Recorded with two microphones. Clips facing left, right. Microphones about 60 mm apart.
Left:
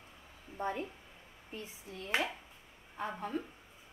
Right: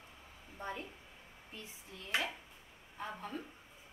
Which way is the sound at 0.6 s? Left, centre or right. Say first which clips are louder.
Left 6 dB; left.